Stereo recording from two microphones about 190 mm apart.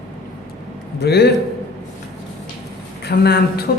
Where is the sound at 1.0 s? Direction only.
60° left (ahead or behind).